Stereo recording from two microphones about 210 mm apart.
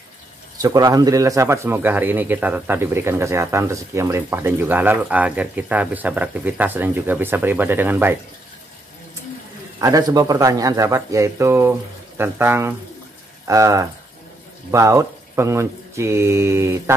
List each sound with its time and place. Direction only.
0.6 s speech: 15° right (ahead or behind)
9.8 s speech: 15° right (ahead or behind)